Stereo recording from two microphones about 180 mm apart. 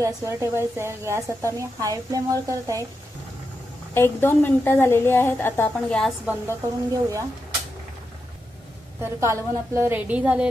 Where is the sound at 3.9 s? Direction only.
10° left (ahead or behind).